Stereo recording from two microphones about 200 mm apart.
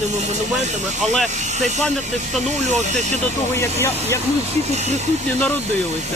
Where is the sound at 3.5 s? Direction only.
15° left (ahead or behind).